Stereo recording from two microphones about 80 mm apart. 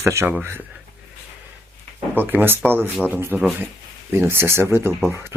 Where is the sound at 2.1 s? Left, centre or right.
Right.